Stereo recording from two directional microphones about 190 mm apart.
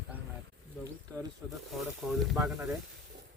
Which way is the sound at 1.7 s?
Centre (ahead or behind).